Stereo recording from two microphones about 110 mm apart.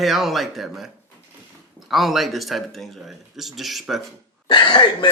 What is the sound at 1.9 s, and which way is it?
Speech, centre (ahead or behind).